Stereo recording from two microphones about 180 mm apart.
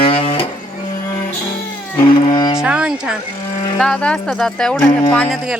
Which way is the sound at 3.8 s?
5° left (ahead or behind).